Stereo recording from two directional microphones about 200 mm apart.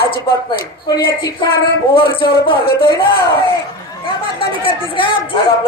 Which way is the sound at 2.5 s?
25° left (ahead or behind).